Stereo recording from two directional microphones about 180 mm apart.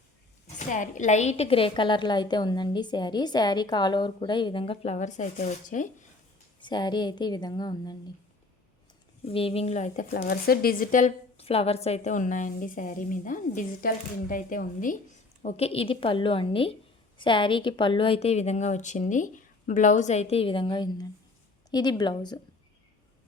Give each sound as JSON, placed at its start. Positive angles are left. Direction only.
{"t": 0.4, "sound": "a woman's voice", "side_deg": 45}
{"t": 6.6, "sound": "a woman's voice", "side_deg": 25}
{"t": 9.2, "sound": "speech", "side_deg": 30}
{"t": 15.4, "sound": "a woman's voice", "side_deg": 35}